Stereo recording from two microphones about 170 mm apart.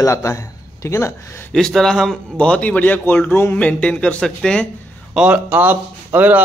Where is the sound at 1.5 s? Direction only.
Centre (ahead or behind).